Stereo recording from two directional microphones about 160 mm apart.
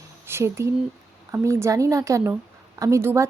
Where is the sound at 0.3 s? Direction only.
15° right (ahead or behind).